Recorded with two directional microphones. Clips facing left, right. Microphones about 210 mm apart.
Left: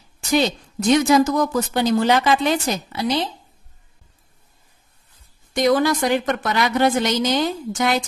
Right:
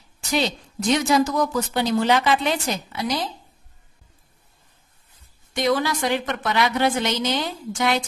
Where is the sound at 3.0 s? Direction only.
25° left (ahead or behind).